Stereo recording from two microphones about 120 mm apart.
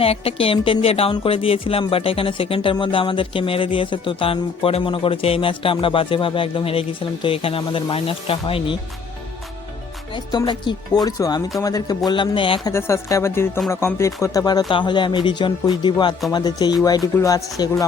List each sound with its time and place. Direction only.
0.0 s speech: 55° left (ahead or behind)
10.2 s speech: 40° left (ahead or behind)
12.6 s speech: 25° left (ahead or behind)
14.7 s speech: 40° left (ahead or behind)